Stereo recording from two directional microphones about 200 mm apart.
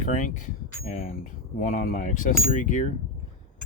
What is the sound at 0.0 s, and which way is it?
Speech, 40° left (ahead or behind).